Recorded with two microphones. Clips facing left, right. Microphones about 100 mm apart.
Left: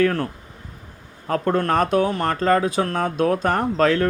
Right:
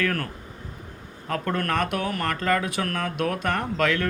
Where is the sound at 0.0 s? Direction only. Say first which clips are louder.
Left 7 dB; 25° left (ahead or behind).